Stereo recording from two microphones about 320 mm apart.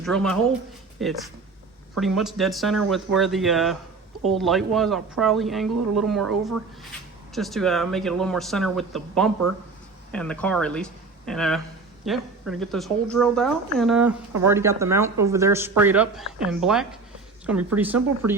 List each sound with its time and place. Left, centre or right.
0.0 s a woman's voice: centre
18.2 s speech: right